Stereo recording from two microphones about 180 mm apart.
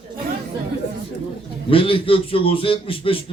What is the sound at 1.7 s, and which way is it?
A man's voice, 30° left (ahead or behind).